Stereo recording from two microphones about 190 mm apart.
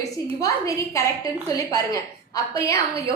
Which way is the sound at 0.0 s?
15° left (ahead or behind).